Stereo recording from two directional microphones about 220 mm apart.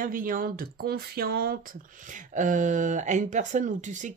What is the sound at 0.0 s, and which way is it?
Speech, 40° right (ahead or behind).